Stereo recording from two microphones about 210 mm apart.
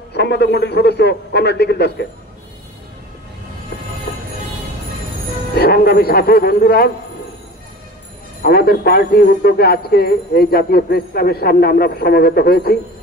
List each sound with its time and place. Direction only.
0.1 s a man's voice: 50° left (ahead or behind)
5.6 s a man's voice: 50° left (ahead or behind)
8.4 s a man's voice: 45° left (ahead or behind)